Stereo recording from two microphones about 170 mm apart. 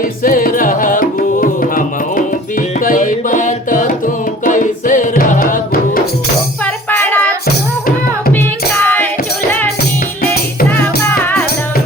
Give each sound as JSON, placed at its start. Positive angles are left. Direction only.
{"t": 0.2, "sound": "music", "side_deg": 55}
{"t": 6.9, "sound": "music", "side_deg": 10}
{"t": 10.7, "sound": "music", "side_deg": 10}